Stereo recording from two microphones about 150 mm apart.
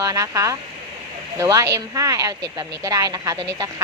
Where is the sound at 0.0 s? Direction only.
20° right (ahead or behind).